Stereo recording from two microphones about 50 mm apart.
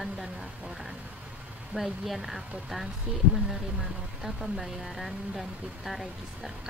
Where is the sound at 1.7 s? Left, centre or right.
Centre.